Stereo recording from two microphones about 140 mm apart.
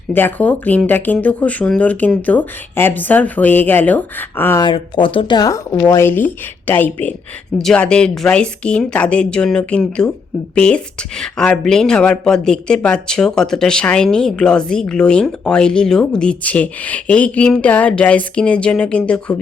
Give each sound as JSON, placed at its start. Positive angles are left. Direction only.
{"t": 0.1, "sound": "a woman's voice", "side_deg": 15}
{"t": 4.6, "sound": "a woman's voice", "side_deg": 35}